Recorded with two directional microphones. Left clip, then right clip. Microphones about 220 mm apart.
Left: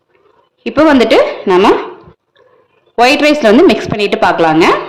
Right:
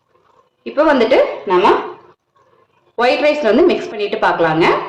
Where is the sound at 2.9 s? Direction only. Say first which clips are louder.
Left 5 dB; 40° left (ahead or behind).